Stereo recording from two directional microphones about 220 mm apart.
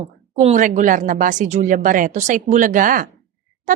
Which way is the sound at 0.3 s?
35° right (ahead or behind).